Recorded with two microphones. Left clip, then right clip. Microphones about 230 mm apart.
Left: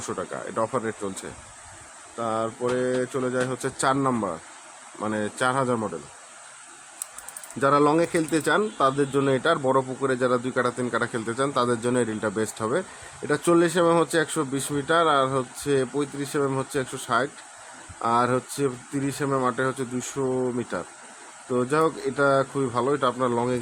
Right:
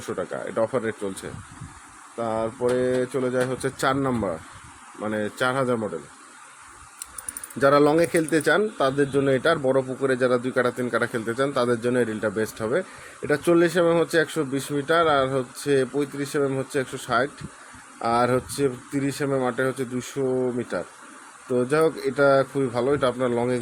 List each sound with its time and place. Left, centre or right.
0.0 s speech: centre
7.6 s speech: centre
20.3 s speech: centre
21.5 s speech: centre